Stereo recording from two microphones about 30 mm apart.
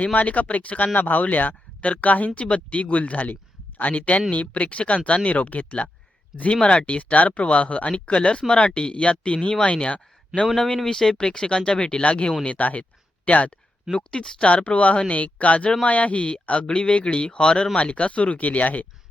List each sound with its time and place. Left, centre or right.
0.0 s speech: left
0.9 s speech: left
1.8 s speech: left
6.5 s speech: left
6.8 s speech: left
7.4 s speech: left
10.8 s speech: centre; by 12.3 s left
12.5 s speech: left
13.9 s speech: left
14.3 s speech: left
16.6 s speech: left
17.7 s speech: left